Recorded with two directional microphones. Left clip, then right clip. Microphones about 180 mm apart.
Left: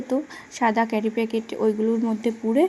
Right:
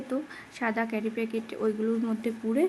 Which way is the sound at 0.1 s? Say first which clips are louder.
Left 8 dB; 20° left (ahead or behind).